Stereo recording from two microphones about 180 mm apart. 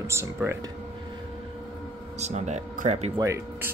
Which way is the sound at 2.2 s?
40° right (ahead or behind).